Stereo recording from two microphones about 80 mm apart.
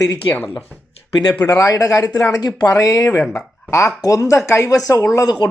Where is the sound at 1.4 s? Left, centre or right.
Left.